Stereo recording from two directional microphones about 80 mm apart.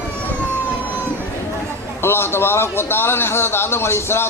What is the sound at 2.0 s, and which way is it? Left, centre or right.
A man's voice, left.